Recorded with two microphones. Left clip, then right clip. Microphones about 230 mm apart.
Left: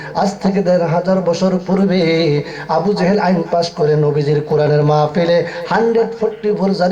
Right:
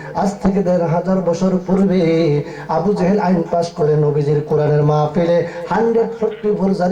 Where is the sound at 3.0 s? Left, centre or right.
Left.